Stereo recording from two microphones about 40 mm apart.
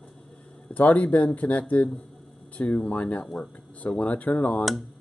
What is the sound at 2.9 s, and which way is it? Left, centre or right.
Speech, left.